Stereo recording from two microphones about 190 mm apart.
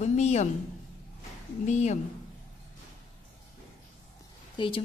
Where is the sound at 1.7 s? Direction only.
35° left (ahead or behind).